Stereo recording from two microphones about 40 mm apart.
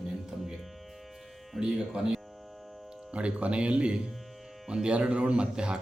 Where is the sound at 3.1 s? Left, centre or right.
Right.